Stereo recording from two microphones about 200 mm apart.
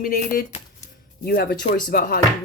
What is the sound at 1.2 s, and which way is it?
Speech, 50° left (ahead or behind).